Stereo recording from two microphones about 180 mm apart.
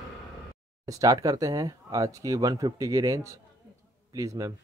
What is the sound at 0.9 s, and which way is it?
Speech, 20° right (ahead or behind).